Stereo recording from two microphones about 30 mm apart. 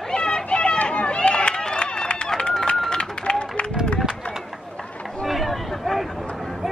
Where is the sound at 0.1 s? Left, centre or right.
Left.